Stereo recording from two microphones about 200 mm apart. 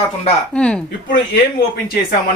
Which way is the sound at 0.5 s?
5° left (ahead or behind).